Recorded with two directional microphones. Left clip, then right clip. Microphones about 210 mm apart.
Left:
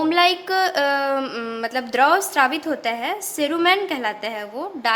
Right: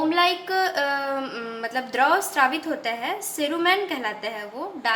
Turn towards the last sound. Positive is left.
turn(degrees=50)  # may be behind; listen again after turning